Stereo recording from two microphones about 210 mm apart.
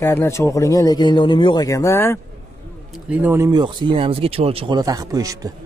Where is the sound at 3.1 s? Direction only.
10° right (ahead or behind); by 4.8 s 30° right (ahead or behind).